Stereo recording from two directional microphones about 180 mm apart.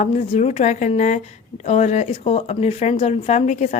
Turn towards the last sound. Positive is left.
turn(degrees=40)  # may be behind; listen again after turning